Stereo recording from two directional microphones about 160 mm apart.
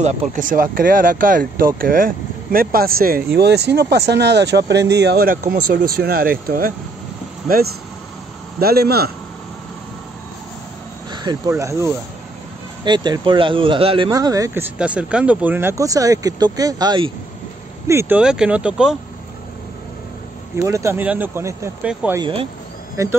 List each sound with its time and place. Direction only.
0.0 s speech: 55° right (ahead or behind)
8.5 s speech: 75° right (ahead or behind)
11.1 s speech: 25° right (ahead or behind)
17.8 s speech: 15° right (ahead or behind)
20.5 s speech: 20° right (ahead or behind)
22.2 s speech: 30° right (ahead or behind)
23.0 s speech: 20° right (ahead or behind)